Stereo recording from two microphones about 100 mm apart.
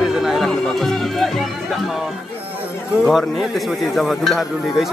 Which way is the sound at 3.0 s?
Centre (ahead or behind).